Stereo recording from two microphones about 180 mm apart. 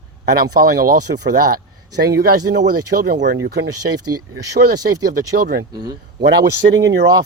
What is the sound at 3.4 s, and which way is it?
Speech, 65° right (ahead or behind).